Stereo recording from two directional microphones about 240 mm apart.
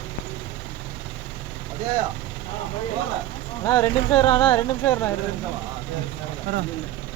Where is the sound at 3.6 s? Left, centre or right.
Centre.